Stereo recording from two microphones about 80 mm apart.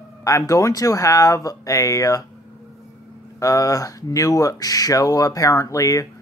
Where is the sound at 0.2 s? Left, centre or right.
Left.